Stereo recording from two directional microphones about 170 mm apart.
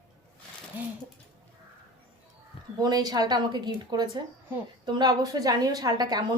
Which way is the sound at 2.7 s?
20° right (ahead or behind).